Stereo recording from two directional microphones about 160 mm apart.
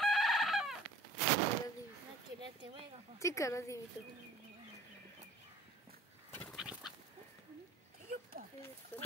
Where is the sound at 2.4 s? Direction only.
30° right (ahead or behind).